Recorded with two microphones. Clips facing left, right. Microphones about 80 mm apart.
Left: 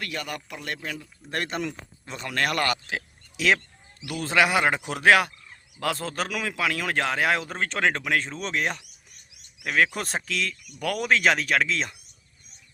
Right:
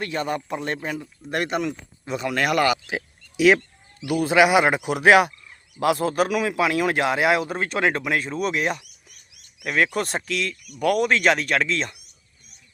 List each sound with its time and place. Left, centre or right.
0.0 s speech: right; by 2.7 s centre
2.9 s a sound: centre
4.0 s speech: centre